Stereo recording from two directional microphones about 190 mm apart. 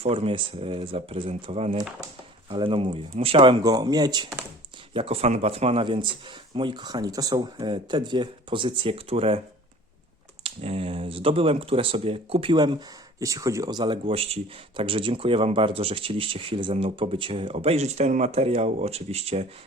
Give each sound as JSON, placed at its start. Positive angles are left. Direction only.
{"t": 0.0, "sound": "speech", "side_deg": -30}
{"t": 10.4, "sound": "speech", "side_deg": -30}